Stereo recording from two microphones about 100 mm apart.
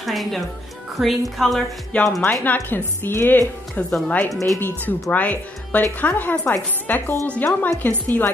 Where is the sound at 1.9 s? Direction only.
10° left (ahead or behind).